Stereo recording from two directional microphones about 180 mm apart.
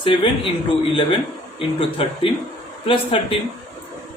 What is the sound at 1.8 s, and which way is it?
Speech, 30° left (ahead or behind).